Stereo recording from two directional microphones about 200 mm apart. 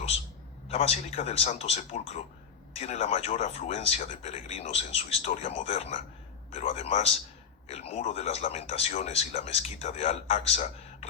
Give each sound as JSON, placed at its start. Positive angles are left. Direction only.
{"t": 0.7, "sound": "speech", "side_deg": 30}